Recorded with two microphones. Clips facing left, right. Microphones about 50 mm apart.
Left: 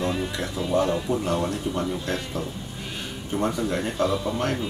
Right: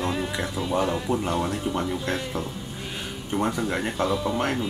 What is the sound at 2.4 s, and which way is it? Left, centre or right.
Speech, right.